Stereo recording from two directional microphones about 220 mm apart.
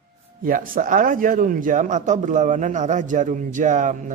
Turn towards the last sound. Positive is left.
turn(degrees=-35)  # may be behind; listen again after turning